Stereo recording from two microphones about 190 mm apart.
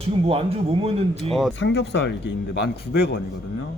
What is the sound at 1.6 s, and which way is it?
Speech, 65° left (ahead or behind).